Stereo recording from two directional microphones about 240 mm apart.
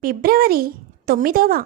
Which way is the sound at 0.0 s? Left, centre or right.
Right.